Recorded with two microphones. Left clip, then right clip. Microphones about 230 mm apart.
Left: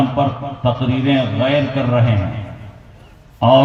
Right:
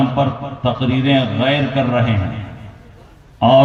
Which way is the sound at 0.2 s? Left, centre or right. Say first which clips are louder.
Even; right.